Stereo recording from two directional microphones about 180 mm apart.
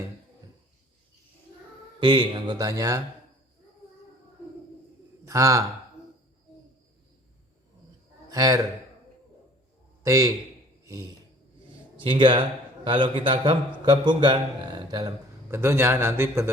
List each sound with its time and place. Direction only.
2.0 s a man's voice: 25° right (ahead or behind)
5.2 s a man's voice: 20° right (ahead or behind)
8.3 s a man's voice: 20° right (ahead or behind)
10.0 s a man's voice: 20° right (ahead or behind)
10.8 s a sound: 20° right (ahead or behind)
12.0 s a man's voice: 25° right (ahead or behind)